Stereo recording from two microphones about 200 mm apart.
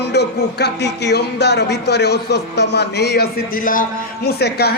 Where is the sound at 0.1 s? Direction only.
55° left (ahead or behind).